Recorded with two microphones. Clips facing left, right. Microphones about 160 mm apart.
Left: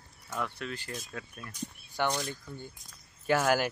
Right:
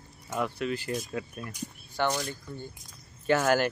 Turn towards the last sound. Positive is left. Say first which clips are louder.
# right 2 dB
turn(degrees=5)  # may be behind; listen again after turning